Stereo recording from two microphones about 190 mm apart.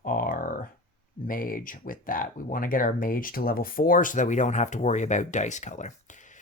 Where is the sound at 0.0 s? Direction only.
45° left (ahead or behind).